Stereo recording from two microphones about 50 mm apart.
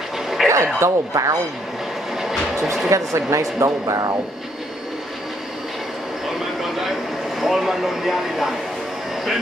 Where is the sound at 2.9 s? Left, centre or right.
Right.